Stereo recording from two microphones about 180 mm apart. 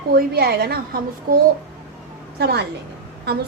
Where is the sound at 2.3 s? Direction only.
65° right (ahead or behind).